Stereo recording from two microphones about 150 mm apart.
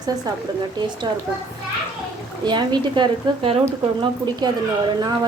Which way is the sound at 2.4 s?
30° right (ahead or behind).